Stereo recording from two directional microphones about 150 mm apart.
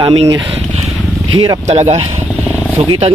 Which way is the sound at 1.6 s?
45° right (ahead or behind).